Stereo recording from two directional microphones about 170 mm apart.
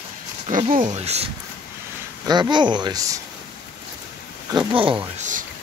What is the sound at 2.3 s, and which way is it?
Speech, 25° right (ahead or behind).